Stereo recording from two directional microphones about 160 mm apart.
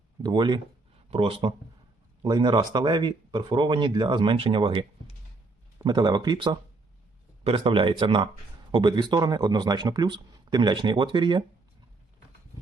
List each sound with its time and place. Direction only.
0.2 s speech: 30° right (ahead or behind)